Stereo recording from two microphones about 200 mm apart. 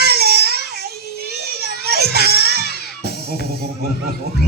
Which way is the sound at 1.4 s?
55° right (ahead or behind).